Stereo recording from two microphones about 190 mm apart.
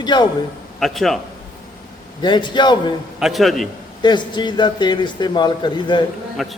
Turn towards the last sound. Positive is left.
turn(degrees=0)  # may be behind; listen again after turning